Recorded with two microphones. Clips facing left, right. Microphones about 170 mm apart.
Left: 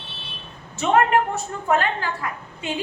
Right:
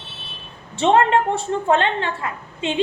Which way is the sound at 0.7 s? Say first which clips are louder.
Right 2 dB; 30° right (ahead or behind).